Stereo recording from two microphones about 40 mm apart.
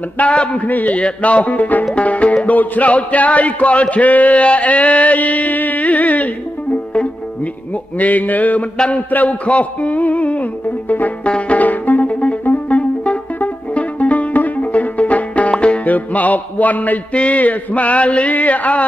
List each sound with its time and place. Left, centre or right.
0.2 s a man's voice: left
0.6 s a sound: left
0.9 s music: left
8.0 s a sound: left
8.9 s music: left
11.2 s music: left